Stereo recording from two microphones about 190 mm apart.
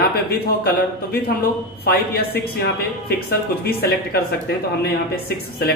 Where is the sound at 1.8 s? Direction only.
55° left (ahead or behind).